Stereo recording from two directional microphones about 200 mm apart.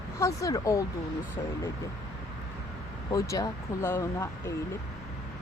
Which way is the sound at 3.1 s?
15° left (ahead or behind).